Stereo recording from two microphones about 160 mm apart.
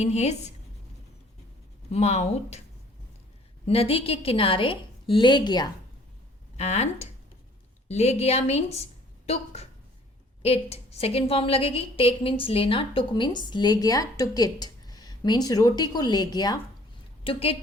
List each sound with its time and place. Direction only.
0.0 s a woman's voice: 45° left (ahead or behind)
1.9 s a woman's voice: 45° left (ahead or behind)
3.7 s a woman's voice: 35° left (ahead or behind)
6.6 s a woman's voice: 40° left (ahead or behind); by 16.6 s 25° left (ahead or behind)
17.2 s a woman's voice: 40° left (ahead or behind)